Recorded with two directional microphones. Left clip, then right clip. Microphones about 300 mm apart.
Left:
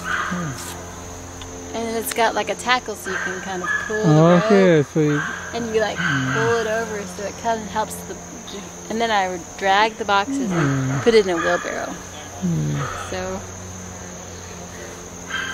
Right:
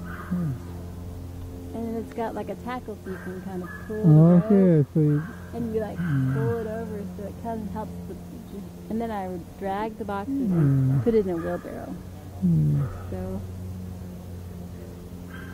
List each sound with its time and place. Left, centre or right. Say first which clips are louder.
0.0 s a sound: left 12 dB; centre
2.0 s speech: left 13 dB; centre
8.9 s speech: left 11 dB; centre